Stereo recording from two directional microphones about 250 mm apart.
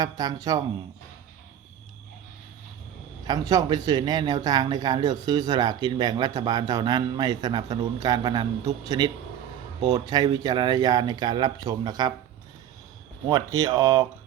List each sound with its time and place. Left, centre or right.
0.0 s speech: centre
3.2 s speech: centre
13.7 s speech: centre